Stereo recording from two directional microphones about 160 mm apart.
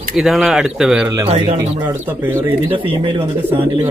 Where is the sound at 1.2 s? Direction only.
30° right (ahead or behind).